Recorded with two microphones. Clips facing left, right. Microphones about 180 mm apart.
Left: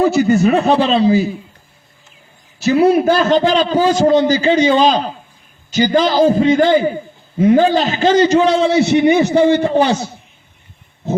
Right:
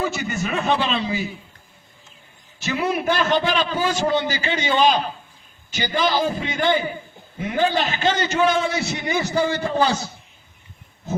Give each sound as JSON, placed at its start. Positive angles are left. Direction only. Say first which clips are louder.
{"t": 0.0, "sound": "a man's voice", "louder": "left 13 dB", "side_deg": 35}
{"t": 2.6, "sound": "a man's voice", "louder": "left 12 dB", "side_deg": 40}